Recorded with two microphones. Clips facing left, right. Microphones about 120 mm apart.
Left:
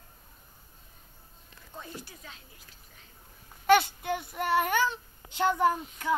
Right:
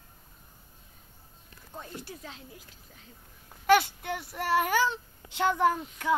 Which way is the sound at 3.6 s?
5° right (ahead or behind).